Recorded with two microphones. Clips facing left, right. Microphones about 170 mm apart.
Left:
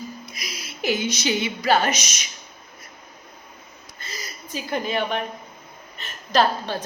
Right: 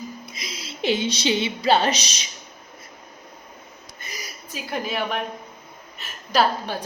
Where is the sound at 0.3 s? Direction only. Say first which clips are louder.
Right 2 dB; 25° right (ahead or behind).